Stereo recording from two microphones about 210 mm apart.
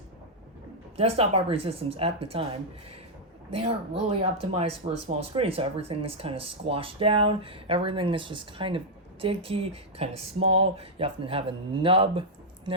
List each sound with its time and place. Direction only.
0.9 s speech: 30° right (ahead or behind)
3.5 s speech: 30° right (ahead or behind)